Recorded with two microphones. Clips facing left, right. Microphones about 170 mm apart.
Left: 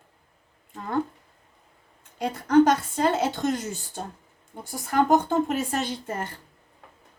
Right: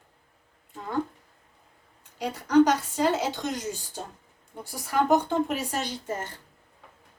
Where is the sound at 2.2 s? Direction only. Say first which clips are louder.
Left 2 dB; 55° left (ahead or behind).